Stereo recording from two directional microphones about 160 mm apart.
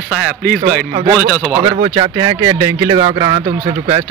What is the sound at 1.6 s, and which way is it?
Speech, 30° right (ahead or behind).